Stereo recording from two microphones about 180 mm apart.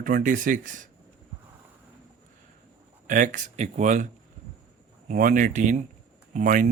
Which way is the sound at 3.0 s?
45° right (ahead or behind).